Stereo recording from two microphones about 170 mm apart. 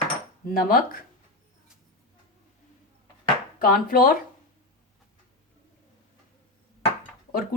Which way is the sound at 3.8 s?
55° left (ahead or behind).